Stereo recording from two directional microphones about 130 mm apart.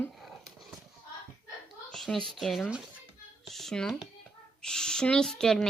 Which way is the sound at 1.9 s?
Centre (ahead or behind).